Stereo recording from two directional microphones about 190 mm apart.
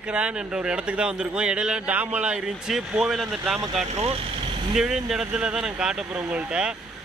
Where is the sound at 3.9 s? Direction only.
30° right (ahead or behind).